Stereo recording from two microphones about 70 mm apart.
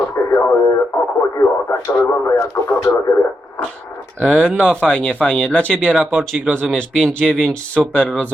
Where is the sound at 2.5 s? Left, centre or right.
Left.